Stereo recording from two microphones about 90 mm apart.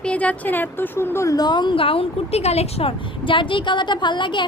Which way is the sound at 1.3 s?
50° left (ahead or behind).